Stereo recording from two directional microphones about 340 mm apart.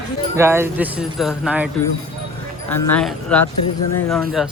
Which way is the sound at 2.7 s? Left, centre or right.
Centre.